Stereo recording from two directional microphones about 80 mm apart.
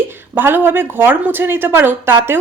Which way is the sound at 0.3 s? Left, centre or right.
Right.